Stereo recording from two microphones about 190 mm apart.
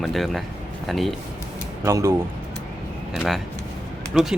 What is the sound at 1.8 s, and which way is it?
Speech, 15° right (ahead or behind).